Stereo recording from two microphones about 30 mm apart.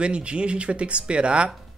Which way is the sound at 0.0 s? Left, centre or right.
Right.